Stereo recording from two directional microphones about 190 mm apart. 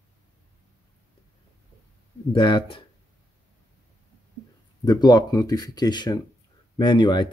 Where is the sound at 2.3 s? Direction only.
25° left (ahead or behind).